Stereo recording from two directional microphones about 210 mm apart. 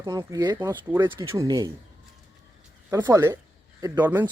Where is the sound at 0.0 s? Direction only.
15° right (ahead or behind).